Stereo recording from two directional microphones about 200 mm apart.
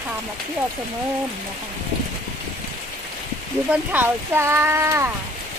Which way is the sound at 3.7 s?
10° right (ahead or behind).